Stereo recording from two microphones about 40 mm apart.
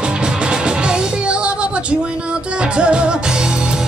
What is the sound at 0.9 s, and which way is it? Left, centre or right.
Music, right.